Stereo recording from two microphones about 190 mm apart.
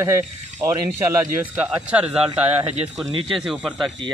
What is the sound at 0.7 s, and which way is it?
Speech, 15° right (ahead or behind).